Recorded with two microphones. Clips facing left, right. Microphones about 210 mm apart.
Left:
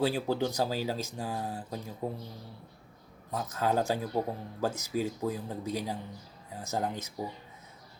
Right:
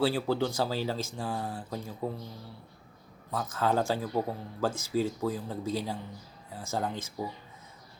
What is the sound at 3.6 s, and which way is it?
Speech, 15° left (ahead or behind).